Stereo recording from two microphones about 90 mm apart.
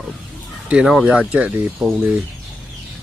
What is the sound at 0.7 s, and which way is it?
Speech, 10° right (ahead or behind).